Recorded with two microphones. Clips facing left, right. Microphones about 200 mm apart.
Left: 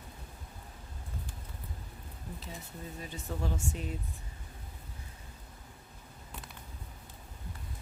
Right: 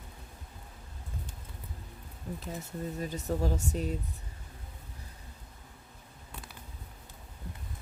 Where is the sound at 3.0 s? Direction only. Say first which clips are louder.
Right 6 dB; 40° right (ahead or behind).